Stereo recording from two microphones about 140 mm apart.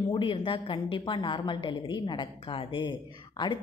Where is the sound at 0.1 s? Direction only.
40° left (ahead or behind).